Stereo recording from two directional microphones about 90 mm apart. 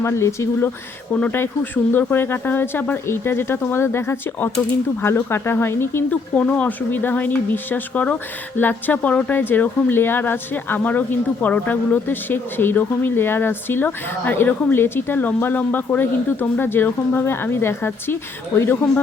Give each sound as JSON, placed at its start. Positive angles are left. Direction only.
{"t": 0.0, "sound": "speech", "side_deg": 30}
{"t": 1.1, "sound": "speech", "side_deg": 20}
{"t": 6.1, "sound": "speech", "side_deg": 15}